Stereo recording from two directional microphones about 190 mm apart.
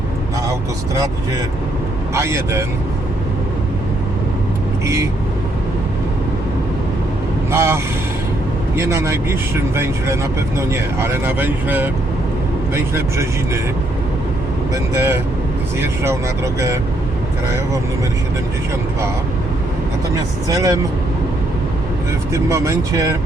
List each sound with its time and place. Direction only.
2.1 s speech: 15° right (ahead or behind)
7.5 s speech: 15° right (ahead or behind)
14.9 s speech: 15° right (ahead or behind)
20.5 s speech: 20° right (ahead or behind)
22.3 s speech: 15° right (ahead or behind)